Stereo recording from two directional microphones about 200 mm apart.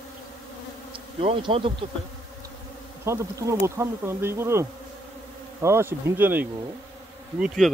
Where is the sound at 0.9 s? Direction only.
25° right (ahead or behind).